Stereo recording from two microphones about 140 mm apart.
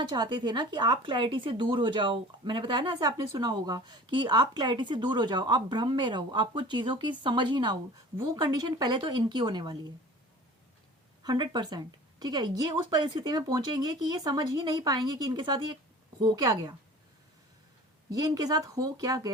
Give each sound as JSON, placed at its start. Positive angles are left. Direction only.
{"t": 0.0, "sound": "speech", "side_deg": -30}
{"t": 11.2, "sound": "speech", "side_deg": -30}
{"t": 18.1, "sound": "speech", "side_deg": -25}